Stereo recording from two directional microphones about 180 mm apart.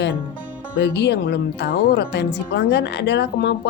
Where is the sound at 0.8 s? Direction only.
70° left (ahead or behind).